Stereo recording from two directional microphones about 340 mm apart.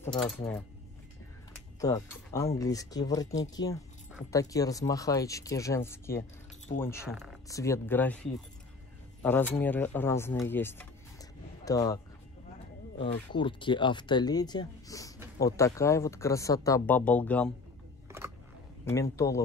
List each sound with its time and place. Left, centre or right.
0.0 s speech: centre
1.8 s speech: centre
19.1 s speech: centre